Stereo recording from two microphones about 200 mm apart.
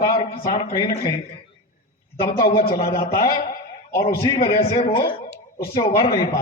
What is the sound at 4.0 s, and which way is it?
Speech, 45° left (ahead or behind).